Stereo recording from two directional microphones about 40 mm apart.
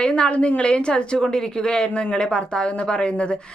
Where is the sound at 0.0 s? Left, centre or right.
Left.